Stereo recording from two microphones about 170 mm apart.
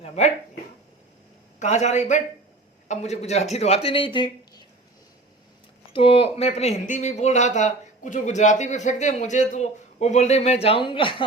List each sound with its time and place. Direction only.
0.2 s speech: 40° left (ahead or behind)
1.5 s a man's voice: 45° left (ahead or behind); by 4.6 s 30° left (ahead or behind)
5.9 s speech: 30° left (ahead or behind)